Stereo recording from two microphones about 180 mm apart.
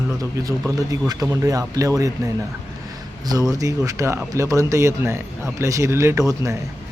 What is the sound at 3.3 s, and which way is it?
Speech, 20° right (ahead or behind).